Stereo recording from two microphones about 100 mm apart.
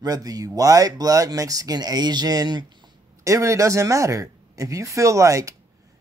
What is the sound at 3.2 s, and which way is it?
Speech, 30° right (ahead or behind).